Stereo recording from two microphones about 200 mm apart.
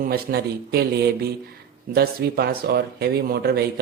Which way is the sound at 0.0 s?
50° right (ahead or behind).